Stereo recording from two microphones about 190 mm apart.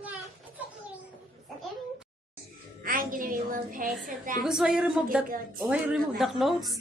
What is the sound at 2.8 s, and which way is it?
A woman's voice, 50° right (ahead or behind).